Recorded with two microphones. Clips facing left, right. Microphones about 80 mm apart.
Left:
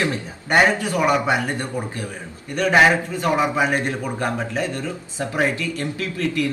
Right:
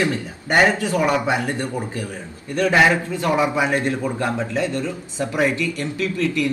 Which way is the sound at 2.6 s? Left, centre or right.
Left.